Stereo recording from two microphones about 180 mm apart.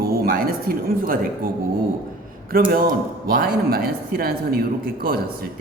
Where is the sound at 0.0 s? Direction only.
60° right (ahead or behind).